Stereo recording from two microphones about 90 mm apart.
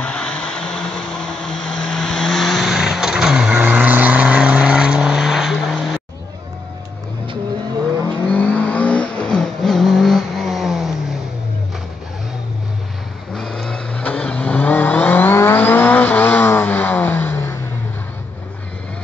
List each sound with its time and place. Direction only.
0.0 s vehicle: 10° left (ahead or behind)
8.1 s vehicle: 15° left (ahead or behind); by 11.0 s 5° right (ahead or behind)
13.3 s vehicle: 5° left (ahead or behind); by 17.6 s 25° left (ahead or behind)